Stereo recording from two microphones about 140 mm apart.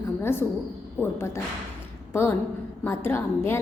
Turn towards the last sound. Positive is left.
turn(degrees=15)  # may be behind; listen again after turning